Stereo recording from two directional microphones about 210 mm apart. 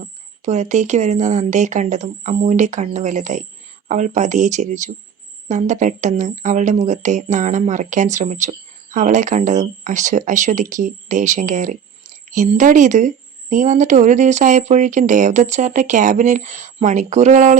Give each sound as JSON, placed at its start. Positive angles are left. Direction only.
{"t": 0.4, "sound": "speech", "side_deg": -35}